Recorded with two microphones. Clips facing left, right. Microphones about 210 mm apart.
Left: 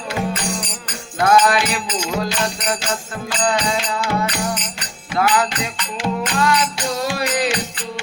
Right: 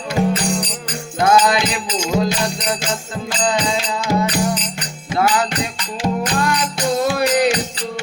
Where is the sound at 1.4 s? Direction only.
20° right (ahead or behind).